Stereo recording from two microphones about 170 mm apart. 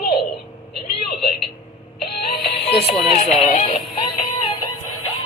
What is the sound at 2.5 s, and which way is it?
Music, 35° left (ahead or behind).